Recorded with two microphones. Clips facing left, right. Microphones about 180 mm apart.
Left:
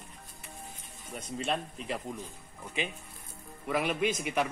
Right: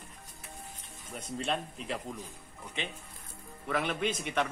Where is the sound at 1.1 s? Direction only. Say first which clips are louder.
Left 1 dB; centre (ahead or behind).